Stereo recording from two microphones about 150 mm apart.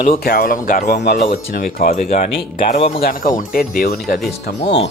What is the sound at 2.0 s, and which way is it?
Speech, 55° left (ahead or behind).